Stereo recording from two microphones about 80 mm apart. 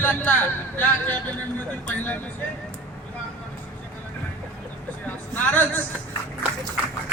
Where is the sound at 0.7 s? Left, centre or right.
Left.